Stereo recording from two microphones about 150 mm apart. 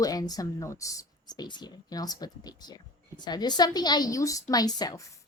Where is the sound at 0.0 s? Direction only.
25° left (ahead or behind).